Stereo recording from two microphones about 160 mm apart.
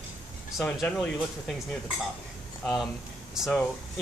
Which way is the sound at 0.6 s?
5° left (ahead or behind).